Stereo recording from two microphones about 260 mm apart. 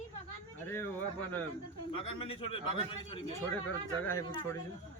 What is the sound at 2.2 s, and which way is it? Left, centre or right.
Speech, left.